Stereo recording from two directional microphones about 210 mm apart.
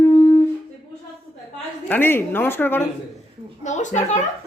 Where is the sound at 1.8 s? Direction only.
10° left (ahead or behind).